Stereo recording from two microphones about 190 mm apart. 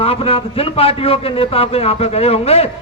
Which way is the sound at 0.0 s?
30° left (ahead or behind).